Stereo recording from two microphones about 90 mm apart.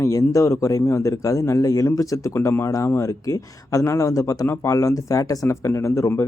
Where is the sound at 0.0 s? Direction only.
40° left (ahead or behind).